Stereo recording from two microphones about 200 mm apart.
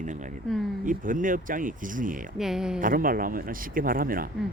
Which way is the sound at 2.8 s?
45° right (ahead or behind).